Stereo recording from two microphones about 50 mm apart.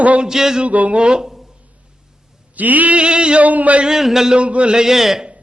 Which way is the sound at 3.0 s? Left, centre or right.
Centre.